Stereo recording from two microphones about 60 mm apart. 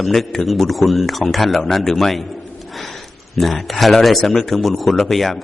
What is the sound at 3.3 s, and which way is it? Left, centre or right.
Speech, centre.